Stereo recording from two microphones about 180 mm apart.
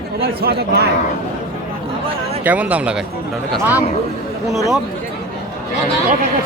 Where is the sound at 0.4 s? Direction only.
60° right (ahead or behind).